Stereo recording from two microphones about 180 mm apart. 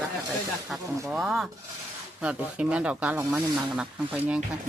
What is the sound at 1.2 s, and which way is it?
Speech, centre (ahead or behind).